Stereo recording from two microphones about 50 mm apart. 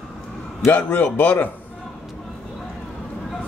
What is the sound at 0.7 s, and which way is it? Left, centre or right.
Speech, left.